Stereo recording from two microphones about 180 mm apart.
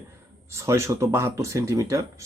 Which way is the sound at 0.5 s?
15° right (ahead or behind).